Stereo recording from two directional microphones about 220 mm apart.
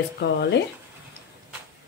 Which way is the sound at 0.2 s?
50° left (ahead or behind).